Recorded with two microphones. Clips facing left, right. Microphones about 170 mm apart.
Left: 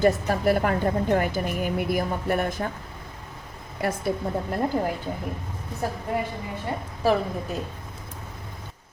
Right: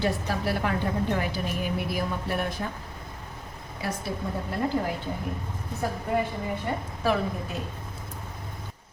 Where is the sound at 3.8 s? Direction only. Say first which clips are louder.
Left 6 dB; 55° left (ahead or behind).